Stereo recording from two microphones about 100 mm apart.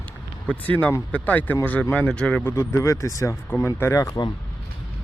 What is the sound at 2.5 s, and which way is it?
Speech, 30° left (ahead or behind).